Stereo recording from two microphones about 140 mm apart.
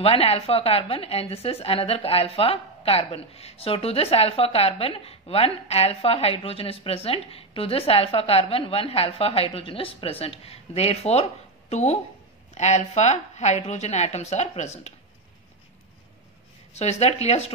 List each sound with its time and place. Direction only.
0.0 s a woman's voice: 45° left (ahead or behind)
16.7 s a woman's voice: 50° left (ahead or behind)